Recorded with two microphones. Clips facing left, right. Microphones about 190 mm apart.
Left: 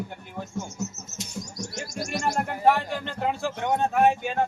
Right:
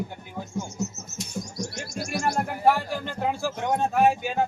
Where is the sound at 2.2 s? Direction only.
5° right (ahead or behind).